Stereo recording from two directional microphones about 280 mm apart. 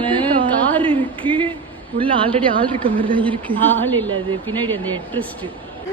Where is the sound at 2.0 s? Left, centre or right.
Centre.